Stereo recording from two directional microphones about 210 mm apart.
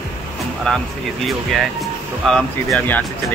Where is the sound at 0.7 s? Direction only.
Centre (ahead or behind).